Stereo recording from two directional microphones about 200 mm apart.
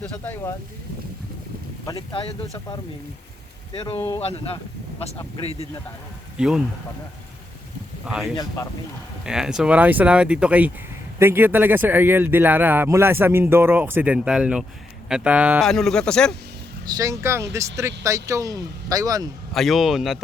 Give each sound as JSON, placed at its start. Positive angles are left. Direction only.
{"t": 0.0, "sound": "speech", "side_deg": 10}
{"t": 1.8, "sound": "speech", "side_deg": 20}
{"t": 3.9, "sound": "speech", "side_deg": 15}
{"t": 4.2, "sound": "speech", "side_deg": 30}
{"t": 8.0, "sound": "a man's voice", "side_deg": -5}
{"t": 16.9, "sound": "a man's voice", "side_deg": -15}
{"t": 19.5, "sound": "speech", "side_deg": 0}